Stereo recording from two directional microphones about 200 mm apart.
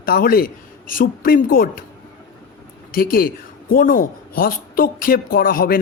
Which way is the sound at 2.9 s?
45° left (ahead or behind).